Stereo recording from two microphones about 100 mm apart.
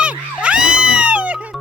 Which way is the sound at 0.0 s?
10° right (ahead or behind).